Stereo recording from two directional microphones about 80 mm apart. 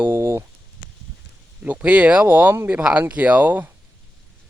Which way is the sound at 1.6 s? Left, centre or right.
Centre.